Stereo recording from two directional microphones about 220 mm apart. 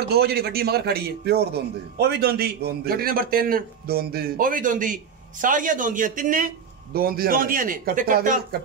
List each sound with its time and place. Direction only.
0.1 s a man's voice: 45° right (ahead or behind)